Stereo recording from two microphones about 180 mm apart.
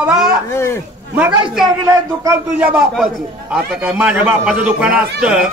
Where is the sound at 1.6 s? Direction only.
20° right (ahead or behind).